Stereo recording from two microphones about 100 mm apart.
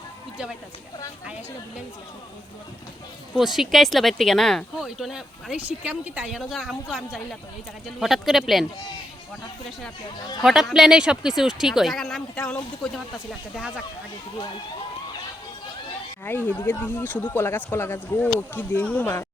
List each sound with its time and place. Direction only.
3.3 s speech: 5° right (ahead or behind)
6.5 s speech: centre (ahead or behind)
10.2 s speech: 45° left (ahead or behind)
10.4 s speech: 5° right (ahead or behind)
16.2 s speech: 20° left (ahead or behind)